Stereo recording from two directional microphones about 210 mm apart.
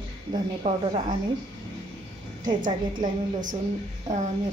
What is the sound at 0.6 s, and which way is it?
Speech, 35° right (ahead or behind).